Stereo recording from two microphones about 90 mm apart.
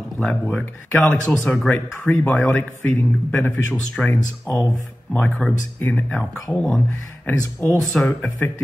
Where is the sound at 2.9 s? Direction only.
20° left (ahead or behind).